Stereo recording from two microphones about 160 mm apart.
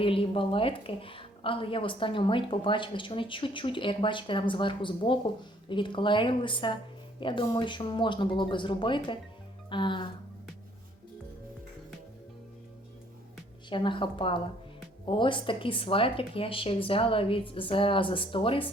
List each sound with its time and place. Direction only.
0.0 s a woman's voice: 35° left (ahead or behind)
9.6 s music: 30° left (ahead or behind)
13.7 s a woman's voice: 30° left (ahead or behind)